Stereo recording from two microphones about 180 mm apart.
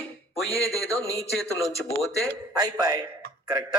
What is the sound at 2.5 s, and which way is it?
Speech, 20° right (ahead or behind).